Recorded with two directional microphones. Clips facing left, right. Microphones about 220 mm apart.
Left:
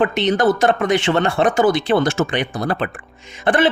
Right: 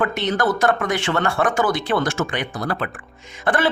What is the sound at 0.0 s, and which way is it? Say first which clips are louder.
Speech: left 5 dB; 20° left (ahead or behind).